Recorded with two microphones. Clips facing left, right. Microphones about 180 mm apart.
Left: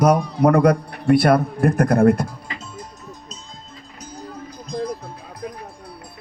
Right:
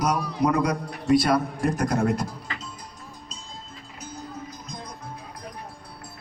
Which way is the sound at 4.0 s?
35° left (ahead or behind).